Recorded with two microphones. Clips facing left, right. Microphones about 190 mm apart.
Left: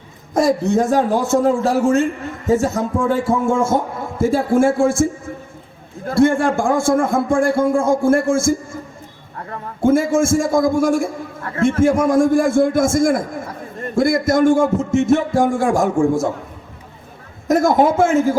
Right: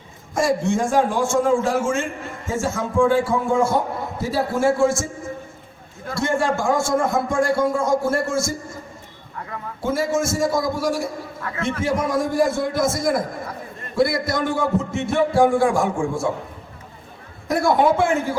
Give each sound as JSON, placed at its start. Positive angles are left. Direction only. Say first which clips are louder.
{"t": 0.3, "sound": "a man's voice", "louder": "left 5 dB", "side_deg": 40}
{"t": 6.1, "sound": "a man's voice", "louder": "left 7 dB", "side_deg": 55}
{"t": 9.8, "sound": "a man's voice", "louder": "left 7 dB", "side_deg": 50}
{"t": 17.5, "sound": "a man's voice", "louder": "left 4 dB", "side_deg": 45}